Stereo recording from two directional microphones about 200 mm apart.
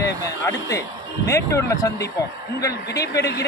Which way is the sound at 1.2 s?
15° left (ahead or behind).